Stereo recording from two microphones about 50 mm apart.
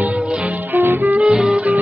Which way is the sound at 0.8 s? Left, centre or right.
Right.